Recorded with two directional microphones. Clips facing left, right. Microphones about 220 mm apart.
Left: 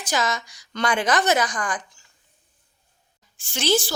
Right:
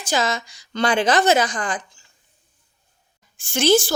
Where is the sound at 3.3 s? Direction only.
50° right (ahead or behind).